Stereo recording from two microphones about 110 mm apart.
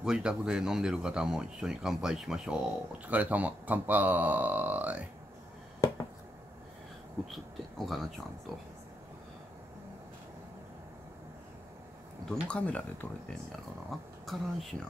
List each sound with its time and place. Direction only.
0.0 s speech: 5° right (ahead or behind)
7.2 s speech: centre (ahead or behind)
12.3 s speech: 10° left (ahead or behind)
13.8 s speech: centre (ahead or behind)